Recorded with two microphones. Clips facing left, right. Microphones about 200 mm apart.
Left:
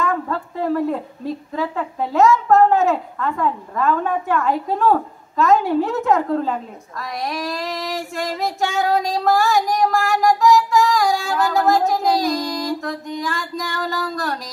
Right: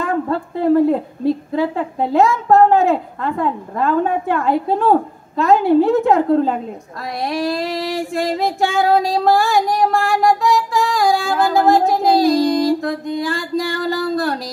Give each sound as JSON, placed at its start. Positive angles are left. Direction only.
{"t": 0.0, "sound": "a sound", "side_deg": -30}
{"t": 1.5, "sound": "speech", "side_deg": -30}
{"t": 9.1, "sound": "child singing", "side_deg": -30}